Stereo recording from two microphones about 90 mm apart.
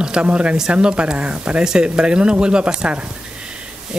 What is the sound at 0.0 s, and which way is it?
Speech, 10° right (ahead or behind).